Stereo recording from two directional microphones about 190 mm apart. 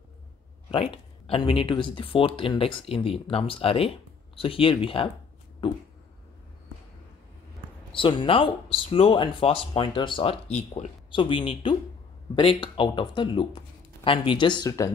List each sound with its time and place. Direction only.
0.7 s speech: 30° left (ahead or behind)
7.9 s speech: 25° left (ahead or behind)